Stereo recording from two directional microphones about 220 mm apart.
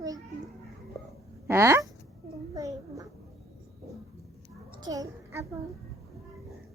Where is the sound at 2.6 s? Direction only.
15° right (ahead or behind).